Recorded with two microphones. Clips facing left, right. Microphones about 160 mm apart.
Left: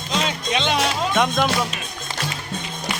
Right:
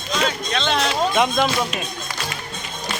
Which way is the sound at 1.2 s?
Centre (ahead or behind).